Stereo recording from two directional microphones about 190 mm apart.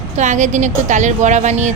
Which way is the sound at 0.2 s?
40° right (ahead or behind).